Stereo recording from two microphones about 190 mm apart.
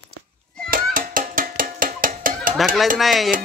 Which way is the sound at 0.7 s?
45° right (ahead or behind).